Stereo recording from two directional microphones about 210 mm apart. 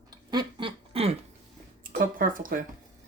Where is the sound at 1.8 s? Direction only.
40° right (ahead or behind).